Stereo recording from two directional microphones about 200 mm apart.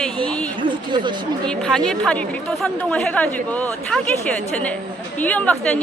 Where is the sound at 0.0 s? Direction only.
5° left (ahead or behind).